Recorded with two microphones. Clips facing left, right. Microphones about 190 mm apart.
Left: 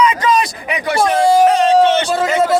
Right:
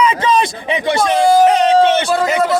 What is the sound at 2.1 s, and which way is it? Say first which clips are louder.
Speech: even; 20° left (ahead or behind).